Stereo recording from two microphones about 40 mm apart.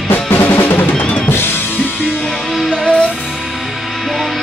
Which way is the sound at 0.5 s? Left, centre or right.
Left.